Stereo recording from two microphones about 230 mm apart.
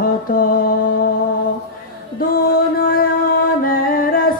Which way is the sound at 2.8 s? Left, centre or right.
Left.